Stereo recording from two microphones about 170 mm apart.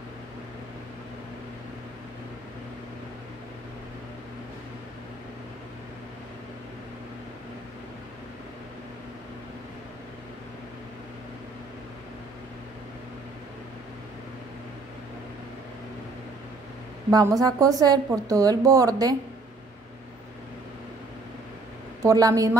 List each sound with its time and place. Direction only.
17.1 s a woman's voice: 20° right (ahead or behind)
22.0 s a woman's voice: 20° right (ahead or behind)